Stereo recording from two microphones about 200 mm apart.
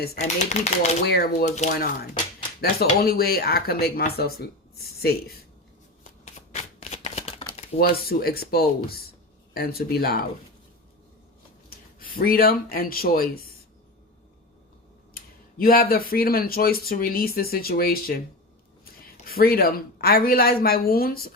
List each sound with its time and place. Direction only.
0.0 s speech: 50° left (ahead or behind)
0.3 s speech: 35° left (ahead or behind)
1.0 s speech: 50° left (ahead or behind)
1.4 s speech: 35° left (ahead or behind)
2.6 s speech: 50° left (ahead or behind)
6.5 s shuffling cards: 35° left (ahead or behind)
7.8 s speech: 50° left (ahead or behind)
11.7 s speech: 45° left (ahead or behind)
15.1 s speech: 45° left (ahead or behind)
19.2 s speech: 50° left (ahead or behind)